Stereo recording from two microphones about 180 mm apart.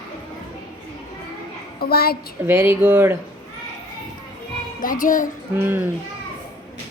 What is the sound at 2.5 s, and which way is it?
Speech, 10° right (ahead or behind).